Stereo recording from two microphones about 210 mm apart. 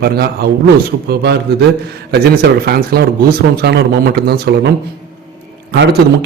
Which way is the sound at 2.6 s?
45° right (ahead or behind).